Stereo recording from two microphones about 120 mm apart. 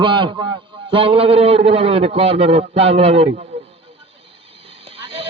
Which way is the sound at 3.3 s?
70° right (ahead or behind).